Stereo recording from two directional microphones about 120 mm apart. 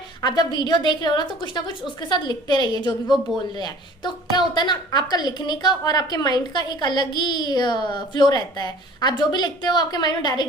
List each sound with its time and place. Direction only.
0.2 s a woman's voice: 35° left (ahead or behind)